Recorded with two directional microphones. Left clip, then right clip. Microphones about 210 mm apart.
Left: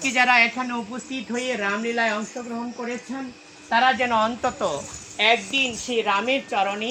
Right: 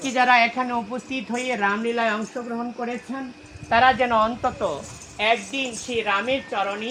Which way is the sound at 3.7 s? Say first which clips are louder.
Right 2 dB; 30° right (ahead or behind).